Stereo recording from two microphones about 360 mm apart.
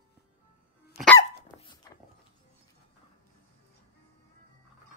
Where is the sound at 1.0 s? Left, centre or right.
Centre.